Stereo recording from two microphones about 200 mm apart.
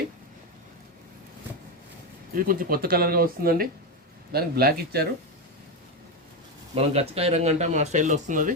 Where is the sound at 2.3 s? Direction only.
45° right (ahead or behind).